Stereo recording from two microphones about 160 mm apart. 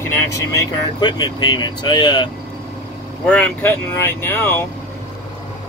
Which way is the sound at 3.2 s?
10° left (ahead or behind).